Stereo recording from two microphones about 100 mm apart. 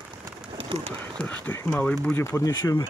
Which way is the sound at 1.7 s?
10° left (ahead or behind).